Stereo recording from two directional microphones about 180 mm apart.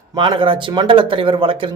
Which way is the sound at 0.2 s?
30° right (ahead or behind).